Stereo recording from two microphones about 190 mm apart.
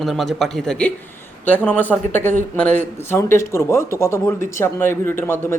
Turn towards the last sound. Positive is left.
turn(degrees=10)  # may be behind; listen again after turning